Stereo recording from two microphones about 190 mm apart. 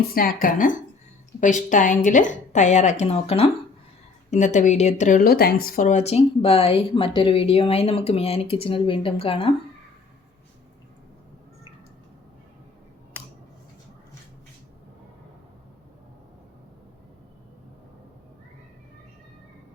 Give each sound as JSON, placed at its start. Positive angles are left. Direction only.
{"t": 0.1, "sound": "a woman's voice", "side_deg": 50}